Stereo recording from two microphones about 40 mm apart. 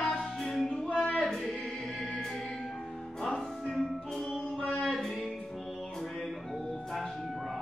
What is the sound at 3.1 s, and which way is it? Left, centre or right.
Music, centre.